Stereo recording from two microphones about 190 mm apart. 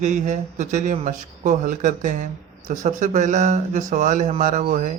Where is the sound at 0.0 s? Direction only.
40° right (ahead or behind).